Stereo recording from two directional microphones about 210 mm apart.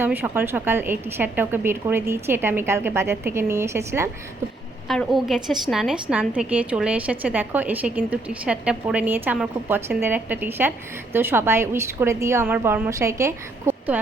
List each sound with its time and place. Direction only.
0.0 s a woman's voice: 10° right (ahead or behind)
4.9 s a woman's voice: centre (ahead or behind)